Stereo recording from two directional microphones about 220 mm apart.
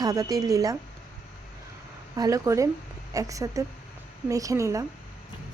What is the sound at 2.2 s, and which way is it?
Speech, 15° right (ahead or behind).